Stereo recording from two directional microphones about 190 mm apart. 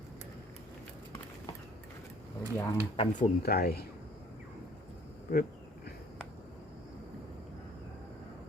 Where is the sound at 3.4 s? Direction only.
55° left (ahead or behind).